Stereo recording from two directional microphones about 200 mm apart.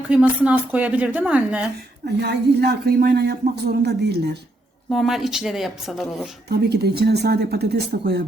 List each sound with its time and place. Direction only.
0.1 s a woman's voice: 5° right (ahead or behind)
2.0 s speech: 55° right (ahead or behind)
4.9 s a woman's voice: centre (ahead or behind)
6.5 s speech: 55° right (ahead or behind)